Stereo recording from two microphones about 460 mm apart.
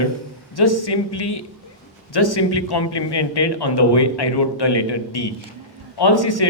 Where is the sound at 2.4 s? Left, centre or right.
Left.